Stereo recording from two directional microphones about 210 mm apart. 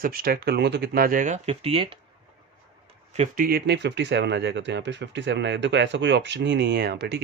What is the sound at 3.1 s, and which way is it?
Speech, 35° right (ahead or behind).